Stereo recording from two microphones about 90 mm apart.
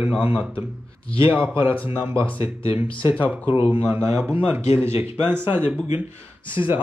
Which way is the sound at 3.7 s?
25° right (ahead or behind).